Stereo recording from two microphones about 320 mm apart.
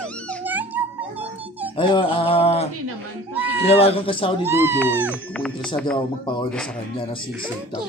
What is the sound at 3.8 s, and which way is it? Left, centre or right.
Speech, centre.